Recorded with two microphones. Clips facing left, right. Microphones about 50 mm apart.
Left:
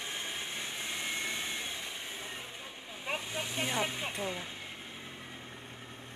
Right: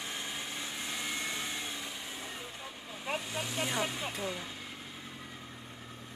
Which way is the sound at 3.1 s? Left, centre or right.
Left.